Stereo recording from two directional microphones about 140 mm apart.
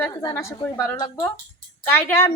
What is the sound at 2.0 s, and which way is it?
Speech, 15° left (ahead or behind).